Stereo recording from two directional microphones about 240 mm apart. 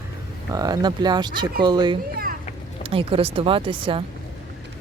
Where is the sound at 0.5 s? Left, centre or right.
Centre.